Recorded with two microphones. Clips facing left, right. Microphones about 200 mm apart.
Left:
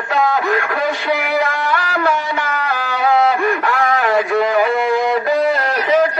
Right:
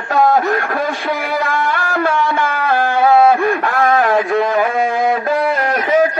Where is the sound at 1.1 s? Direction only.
50° right (ahead or behind).